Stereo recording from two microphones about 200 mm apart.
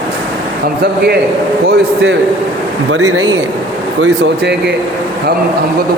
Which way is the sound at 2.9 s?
90° right.